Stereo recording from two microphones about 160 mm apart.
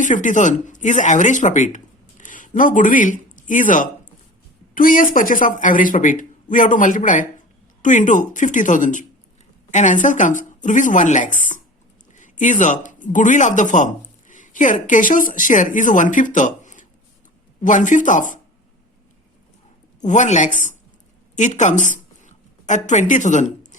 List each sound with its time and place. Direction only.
0.0 s a man's voice: 50° left (ahead or behind)
20.0 s a woman's voice: 50° left (ahead or behind)